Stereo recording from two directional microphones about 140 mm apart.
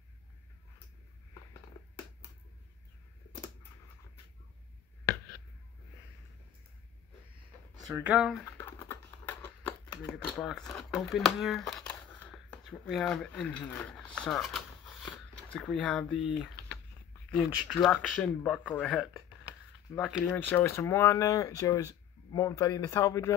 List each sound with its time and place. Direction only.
8.0 s speech: 5° right (ahead or behind)
8.5 s a sound: 15° left (ahead or behind)
10.3 s speech: 5° left (ahead or behind)
20.2 s speech: 15° left (ahead or behind)